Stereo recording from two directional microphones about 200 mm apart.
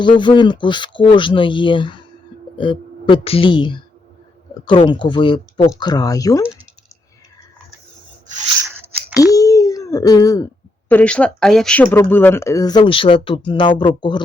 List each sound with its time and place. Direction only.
0.2 s speech: 25° left (ahead or behind)
9.1 s a sound: 15° left (ahead or behind)
10.8 s speech: 5° left (ahead or behind); by 14.2 s 25° left (ahead or behind)